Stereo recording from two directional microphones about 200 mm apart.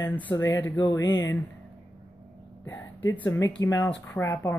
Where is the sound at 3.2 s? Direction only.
15° left (ahead or behind).